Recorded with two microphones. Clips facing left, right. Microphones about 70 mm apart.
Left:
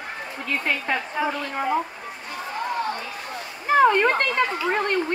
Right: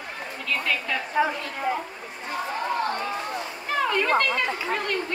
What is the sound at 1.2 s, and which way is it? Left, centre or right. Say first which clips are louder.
Speech: right 4 dB; centre.